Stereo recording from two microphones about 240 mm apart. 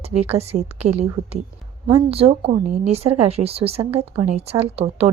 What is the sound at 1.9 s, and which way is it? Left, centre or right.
Speech, right.